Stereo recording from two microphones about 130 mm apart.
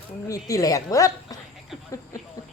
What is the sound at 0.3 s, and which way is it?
A woman's voice, 25° left (ahead or behind).